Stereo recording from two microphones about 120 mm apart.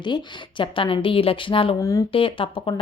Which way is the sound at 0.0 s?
40° left (ahead or behind).